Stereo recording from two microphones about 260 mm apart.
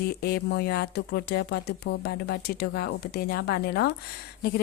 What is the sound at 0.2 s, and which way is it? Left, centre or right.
A woman's voice, left.